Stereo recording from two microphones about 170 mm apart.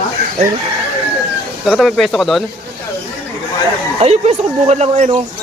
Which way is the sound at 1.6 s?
Centre (ahead or behind).